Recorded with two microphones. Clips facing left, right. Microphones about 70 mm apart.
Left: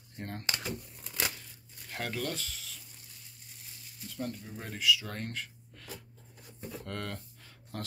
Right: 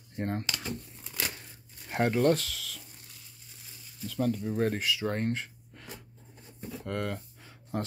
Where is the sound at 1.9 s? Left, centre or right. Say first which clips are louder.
Right 11 dB; right.